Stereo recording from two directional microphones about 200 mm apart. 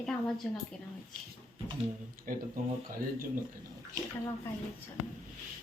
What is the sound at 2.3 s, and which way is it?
Speech, 40° right (ahead or behind).